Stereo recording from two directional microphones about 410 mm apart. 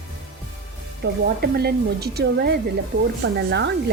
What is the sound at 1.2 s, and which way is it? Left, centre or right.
Speech, right.